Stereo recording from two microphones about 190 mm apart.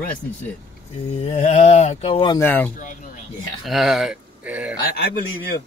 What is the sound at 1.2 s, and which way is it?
Speech, 30° left (ahead or behind).